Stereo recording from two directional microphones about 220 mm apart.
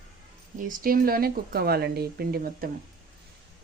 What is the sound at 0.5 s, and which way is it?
Speech, 40° right (ahead or behind).